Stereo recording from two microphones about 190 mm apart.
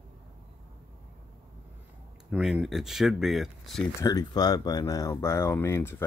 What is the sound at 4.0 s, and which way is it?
Speech, 20° left (ahead or behind).